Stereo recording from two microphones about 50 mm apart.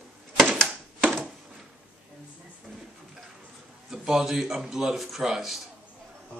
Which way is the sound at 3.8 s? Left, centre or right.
Centre.